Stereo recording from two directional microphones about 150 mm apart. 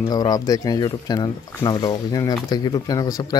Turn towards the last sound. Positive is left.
turn(degrees=25)  # may be behind; listen again after turning